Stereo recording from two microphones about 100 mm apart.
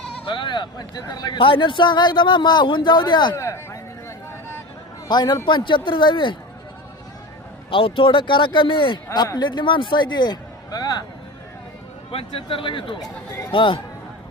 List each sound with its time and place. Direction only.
0.3 s a man's voice: 55° left (ahead or behind)
3.3 s speech: 30° left (ahead or behind)
5.0 s a man's voice: 45° left (ahead or behind)
7.7 s speech: 60° left (ahead or behind)
9.1 s a man's voice: 45° left (ahead or behind)
12.1 s speech: 65° left (ahead or behind)